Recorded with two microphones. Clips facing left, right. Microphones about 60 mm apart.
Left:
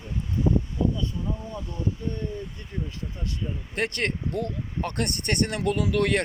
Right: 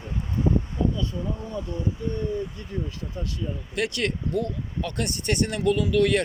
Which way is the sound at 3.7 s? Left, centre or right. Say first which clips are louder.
Right 1 dB; left.